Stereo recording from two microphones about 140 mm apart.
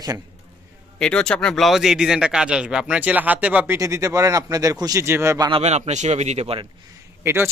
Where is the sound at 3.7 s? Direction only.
20° right (ahead or behind).